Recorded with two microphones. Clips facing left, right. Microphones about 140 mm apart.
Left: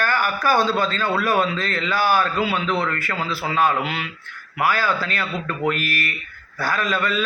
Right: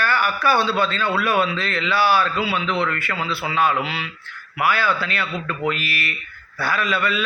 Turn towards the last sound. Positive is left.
turn(degrees=40)  # may be behind; listen again after turning